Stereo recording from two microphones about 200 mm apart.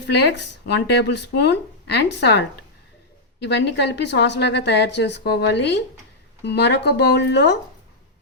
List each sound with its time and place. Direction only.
0.1 s a woman's voice: 55° left (ahead or behind)
3.4 s a woman's voice: 60° left (ahead or behind)